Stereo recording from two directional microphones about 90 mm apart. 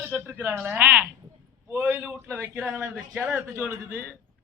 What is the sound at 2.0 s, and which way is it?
Speech, 30° right (ahead or behind).